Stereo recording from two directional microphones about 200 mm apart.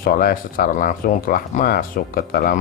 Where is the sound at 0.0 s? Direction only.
45° left (ahead or behind).